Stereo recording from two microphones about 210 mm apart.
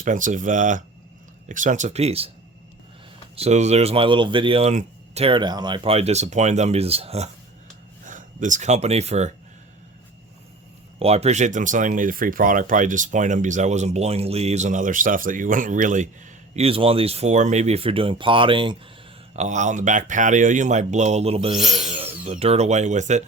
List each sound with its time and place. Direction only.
0.0 s speech: 40° right (ahead or behind)
3.3 s speech: 30° right (ahead or behind)
11.0 s speech: 30° right (ahead or behind)
19.4 s speech: 35° right (ahead or behind)
21.8 s tools: 30° right (ahead or behind)
22.3 s speech: 30° right (ahead or behind)